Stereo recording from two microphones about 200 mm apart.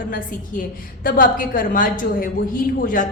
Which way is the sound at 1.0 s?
45° left (ahead or behind).